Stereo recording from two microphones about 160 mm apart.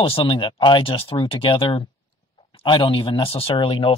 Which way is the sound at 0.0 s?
35° left (ahead or behind).